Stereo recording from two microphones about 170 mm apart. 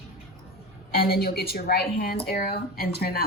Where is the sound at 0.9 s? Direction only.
65° left (ahead or behind).